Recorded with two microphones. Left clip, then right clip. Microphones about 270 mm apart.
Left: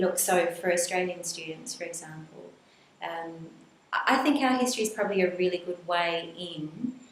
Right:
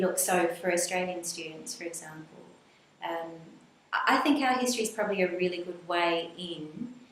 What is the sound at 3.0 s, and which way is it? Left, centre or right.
A woman's voice, centre.